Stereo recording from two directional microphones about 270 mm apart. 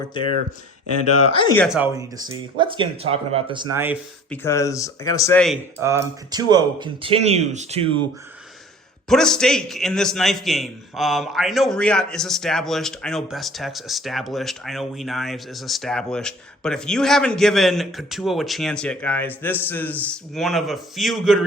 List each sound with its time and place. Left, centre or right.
0.1 s speech: centre
0.9 s speech: left
1.3 s speech: centre
1.5 s speech: centre
4.3 s speech: centre
5.8 s speech: centre
9.0 s a man's voice: centre